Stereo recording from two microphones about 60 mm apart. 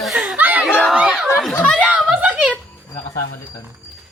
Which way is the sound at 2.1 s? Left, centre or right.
Right.